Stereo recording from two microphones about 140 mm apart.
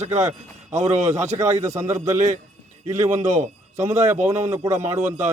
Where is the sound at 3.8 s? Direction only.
20° right (ahead or behind).